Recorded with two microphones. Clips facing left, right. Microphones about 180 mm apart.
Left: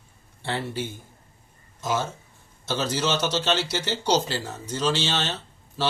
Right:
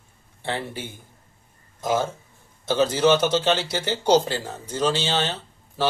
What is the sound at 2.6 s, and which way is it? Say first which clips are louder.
Speech: right 7 dB; 55° right (ahead or behind).